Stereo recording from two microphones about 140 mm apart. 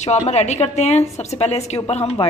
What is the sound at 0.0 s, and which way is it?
A woman's voice, 55° left (ahead or behind).